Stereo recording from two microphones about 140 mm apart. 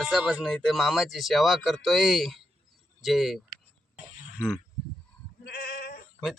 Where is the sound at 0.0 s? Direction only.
Centre (ahead or behind).